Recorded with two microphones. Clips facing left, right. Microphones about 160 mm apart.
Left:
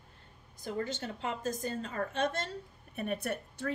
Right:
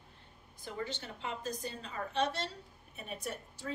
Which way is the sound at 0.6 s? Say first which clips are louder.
Left 5 dB; 45° left (ahead or behind).